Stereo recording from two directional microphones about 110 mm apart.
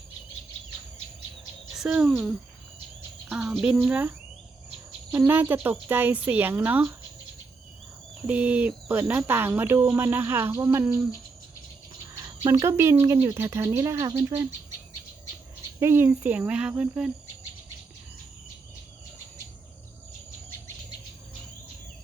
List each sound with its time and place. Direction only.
1.7 s speech: 5° right (ahead or behind)
5.1 s speech: 20° right (ahead or behind)
8.3 s speech: 15° right (ahead or behind)
12.4 s speech: 35° right (ahead or behind)
12.6 s speech: 25° right (ahead or behind)
15.8 s speech: 20° right (ahead or behind)